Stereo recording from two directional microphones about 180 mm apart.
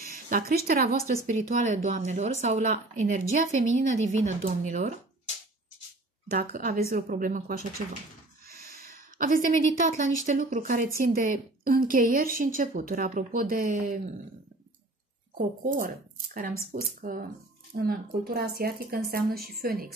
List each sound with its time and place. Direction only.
0.3 s a woman's voice: 55° right (ahead or behind)
1.2 s speech: 45° right (ahead or behind)
6.3 s a woman's voice: 45° right (ahead or behind)
15.3 s a woman's voice: 50° right (ahead or behind)